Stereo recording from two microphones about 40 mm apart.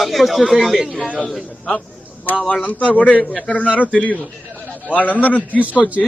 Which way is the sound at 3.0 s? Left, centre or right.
Left.